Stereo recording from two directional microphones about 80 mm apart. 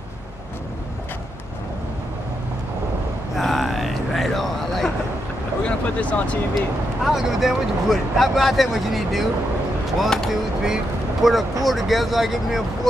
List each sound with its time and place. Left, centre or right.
3.3 s a sound: centre
5.6 s speech: centre
7.1 s speech: centre